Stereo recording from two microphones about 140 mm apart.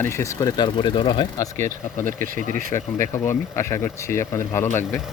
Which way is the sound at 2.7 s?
20° left (ahead or behind).